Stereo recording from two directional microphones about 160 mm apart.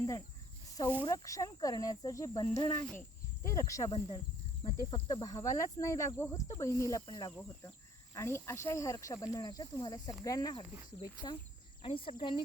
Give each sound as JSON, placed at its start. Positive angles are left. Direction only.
{"t": 1.0, "sound": "speech", "side_deg": 20}